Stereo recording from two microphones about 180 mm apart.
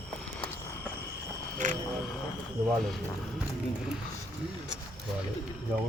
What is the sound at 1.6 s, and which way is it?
Cricket, 45° right (ahead or behind).